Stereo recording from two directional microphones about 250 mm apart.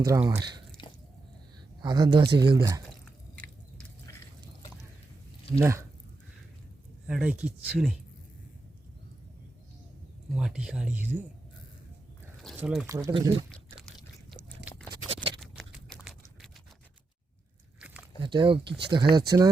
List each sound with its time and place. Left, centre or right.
0.0 s speech: centre
1.8 s speech: centre
3.0 s drip: centre
5.5 s speech: centre
7.1 s speech: centre
10.3 s speech: centre
12.4 s speech: centre
13.7 s a sound: centre
15.4 s a sound: centre
17.7 s a sound: centre
18.2 s speech: centre